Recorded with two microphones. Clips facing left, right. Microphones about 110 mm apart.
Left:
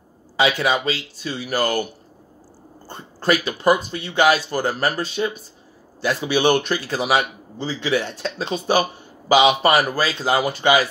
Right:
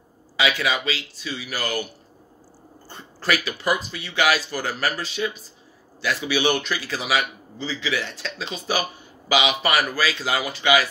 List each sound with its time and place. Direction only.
0.4 s a man's voice: 35° left (ahead or behind)
3.3 s a man's voice: 30° left (ahead or behind)